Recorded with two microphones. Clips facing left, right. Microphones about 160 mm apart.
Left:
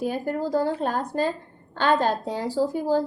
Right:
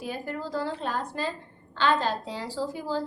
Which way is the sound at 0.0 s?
45° left (ahead or behind).